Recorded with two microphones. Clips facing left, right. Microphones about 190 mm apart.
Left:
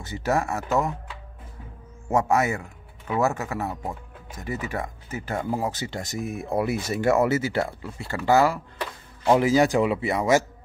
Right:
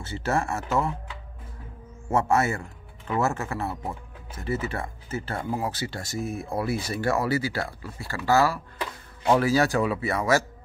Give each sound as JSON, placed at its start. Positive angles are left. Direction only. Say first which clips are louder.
{"t": 0.0, "sound": "speech", "louder": "left 2 dB", "side_deg": 15}
{"t": 2.0, "sound": "speech", "louder": "left 1 dB", "side_deg": 15}